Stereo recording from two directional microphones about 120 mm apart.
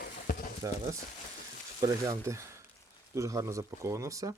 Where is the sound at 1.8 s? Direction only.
25° right (ahead or behind).